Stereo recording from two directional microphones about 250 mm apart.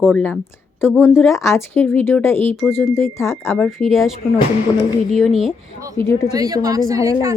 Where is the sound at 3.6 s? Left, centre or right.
Centre.